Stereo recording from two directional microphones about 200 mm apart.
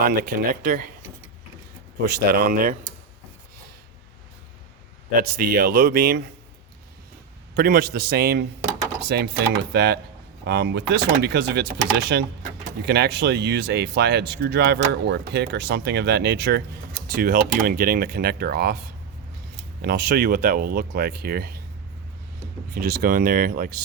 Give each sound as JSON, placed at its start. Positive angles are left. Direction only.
{"t": 0.0, "sound": "speech", "side_deg": -50}
{"t": 2.0, "sound": "speech", "side_deg": -50}
{"t": 5.2, "sound": "speech", "side_deg": -50}
{"t": 7.5, "sound": "speech", "side_deg": -50}
{"t": 19.8, "sound": "speech", "side_deg": -50}
{"t": 22.7, "sound": "speech", "side_deg": -55}